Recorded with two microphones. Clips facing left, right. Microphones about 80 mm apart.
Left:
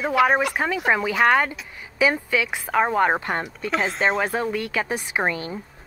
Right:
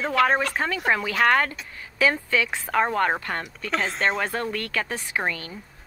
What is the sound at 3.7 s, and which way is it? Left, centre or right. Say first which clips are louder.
Speech: left 2 dB; centre.